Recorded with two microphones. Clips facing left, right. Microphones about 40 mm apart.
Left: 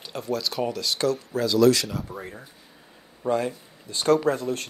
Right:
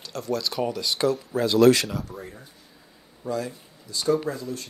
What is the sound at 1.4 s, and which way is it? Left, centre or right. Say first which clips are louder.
Speech: right 2 dB; right.